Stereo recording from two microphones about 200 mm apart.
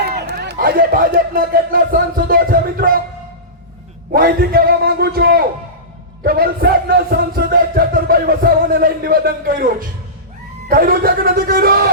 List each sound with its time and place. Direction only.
0.2 s music: 55° right (ahead or behind)
4.1 s music: 50° right (ahead or behind)